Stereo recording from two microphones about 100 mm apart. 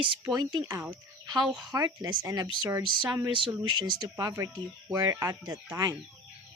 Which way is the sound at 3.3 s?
55° right (ahead or behind).